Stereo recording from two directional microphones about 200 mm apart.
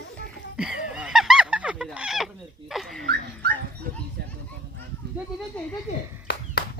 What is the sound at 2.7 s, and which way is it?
Dog, centre (ahead or behind).